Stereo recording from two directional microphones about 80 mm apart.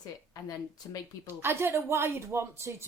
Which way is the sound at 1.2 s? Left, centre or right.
Right.